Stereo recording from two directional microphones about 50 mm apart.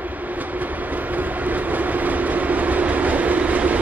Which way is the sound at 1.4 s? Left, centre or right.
Right.